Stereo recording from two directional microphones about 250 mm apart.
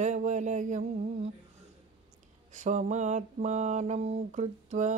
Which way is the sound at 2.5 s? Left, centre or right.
Right.